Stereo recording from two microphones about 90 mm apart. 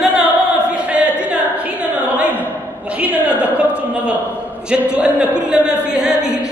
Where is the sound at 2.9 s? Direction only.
15° right (ahead or behind).